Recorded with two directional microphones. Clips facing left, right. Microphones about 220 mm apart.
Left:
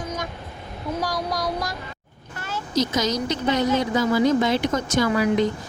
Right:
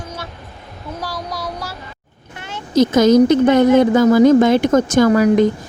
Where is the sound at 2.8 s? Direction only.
55° right (ahead or behind).